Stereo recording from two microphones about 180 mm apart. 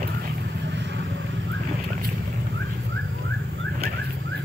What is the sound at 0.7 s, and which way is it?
Vehicle, 75° right (ahead or behind).